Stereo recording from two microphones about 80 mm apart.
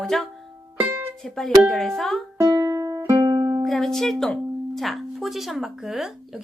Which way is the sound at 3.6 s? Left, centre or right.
Centre.